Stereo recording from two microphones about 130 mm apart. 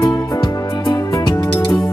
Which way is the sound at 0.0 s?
25° left (ahead or behind).